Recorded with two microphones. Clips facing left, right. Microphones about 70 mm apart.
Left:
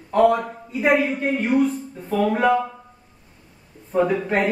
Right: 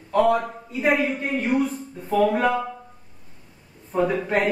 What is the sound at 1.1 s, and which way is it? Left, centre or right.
Speech, centre.